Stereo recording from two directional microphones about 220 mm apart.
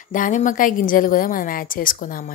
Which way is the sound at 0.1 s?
35° left (ahead or behind).